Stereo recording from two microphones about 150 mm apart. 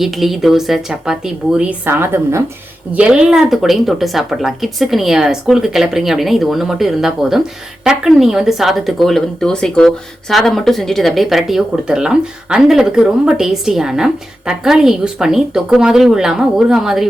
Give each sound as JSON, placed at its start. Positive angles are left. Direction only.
{"t": 0.0, "sound": "speech", "side_deg": 0}